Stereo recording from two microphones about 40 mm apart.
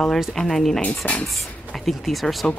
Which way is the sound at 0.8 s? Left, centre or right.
Left.